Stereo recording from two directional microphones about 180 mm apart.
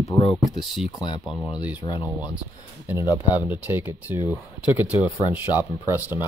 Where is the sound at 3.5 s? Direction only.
10° right (ahead or behind).